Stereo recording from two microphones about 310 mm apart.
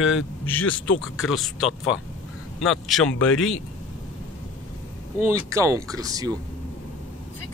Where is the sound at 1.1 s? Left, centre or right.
Centre.